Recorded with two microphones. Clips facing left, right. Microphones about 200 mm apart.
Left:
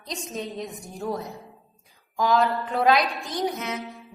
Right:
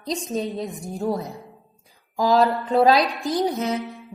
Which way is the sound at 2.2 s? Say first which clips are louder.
Right 3 dB; 35° right (ahead or behind).